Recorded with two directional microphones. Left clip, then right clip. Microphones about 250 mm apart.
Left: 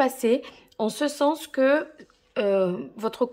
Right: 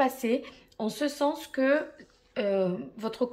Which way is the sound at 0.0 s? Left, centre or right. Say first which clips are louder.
Left 5 dB; centre.